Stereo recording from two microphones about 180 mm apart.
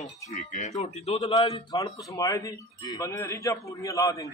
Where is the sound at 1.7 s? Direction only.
20° left (ahead or behind).